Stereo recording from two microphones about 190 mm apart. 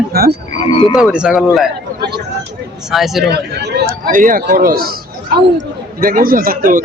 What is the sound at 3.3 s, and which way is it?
Speech, 60° right (ahead or behind).